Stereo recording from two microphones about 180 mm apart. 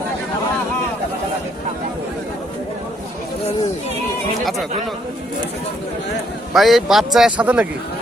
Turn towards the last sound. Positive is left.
turn(degrees=-10)  # may be behind; listen again after turning